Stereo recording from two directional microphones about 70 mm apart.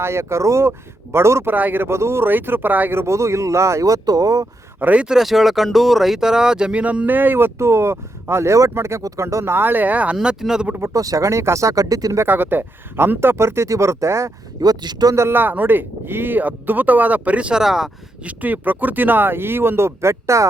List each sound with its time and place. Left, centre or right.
0.0 s speech: right
1.5 s speech: right
4.8 s speech: right
5.0 s speech: centre; by 10.2 s right
10.2 s speech: centre
10.9 s speech: right
12.2 s speech: right
14.6 s speech: right
15.3 s speech: right
17.6 s speech: centre
18.3 s speech: right